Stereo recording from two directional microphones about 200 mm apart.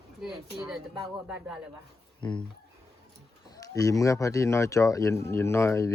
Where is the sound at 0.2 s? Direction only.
Centre (ahead or behind).